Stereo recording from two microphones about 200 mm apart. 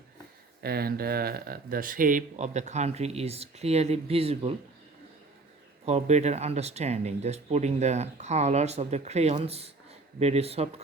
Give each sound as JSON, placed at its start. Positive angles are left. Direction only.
{"t": 0.6, "sound": "speech", "side_deg": -50}
{"t": 5.8, "sound": "speech", "side_deg": -35}